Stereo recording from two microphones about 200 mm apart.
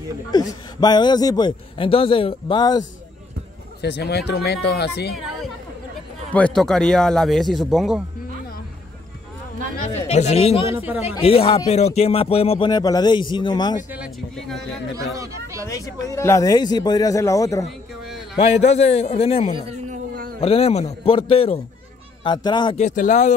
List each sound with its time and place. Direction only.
0.3 s speech: 20° left (ahead or behind)
3.8 s speech: 55° left (ahead or behind)
6.3 s a man's voice: 5° left (ahead or behind)
9.9 s a man's voice: 35° left (ahead or behind)
10.7 s a man's voice: 10° right (ahead or behind)
11.1 s speech: 30° left (ahead or behind)
13.9 s a man's voice: centre (ahead or behind)
15.7 s a man's voice: 15° left (ahead or behind)
17.6 s a sound: centre (ahead or behind)
18.4 s a man's voice: 35° left (ahead or behind)
19.9 s a sound: 45° right (ahead or behind)
20.3 s speech: 30° left (ahead or behind)
22.8 s a man's voice: 40° left (ahead or behind)